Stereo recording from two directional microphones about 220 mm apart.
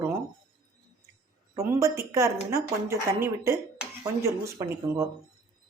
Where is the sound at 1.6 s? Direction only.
15° right (ahead or behind).